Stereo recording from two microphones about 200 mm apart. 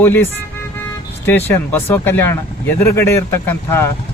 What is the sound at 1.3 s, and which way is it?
Speech, 10° left (ahead or behind).